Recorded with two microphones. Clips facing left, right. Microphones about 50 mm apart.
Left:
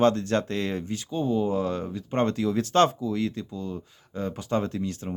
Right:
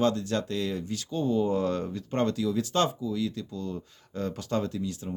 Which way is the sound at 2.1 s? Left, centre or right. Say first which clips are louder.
Left 3 dB; left.